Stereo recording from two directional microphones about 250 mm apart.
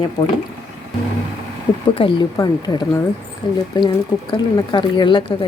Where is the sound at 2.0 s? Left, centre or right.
Centre.